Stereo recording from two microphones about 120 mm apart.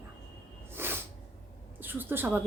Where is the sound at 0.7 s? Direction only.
20° right (ahead or behind).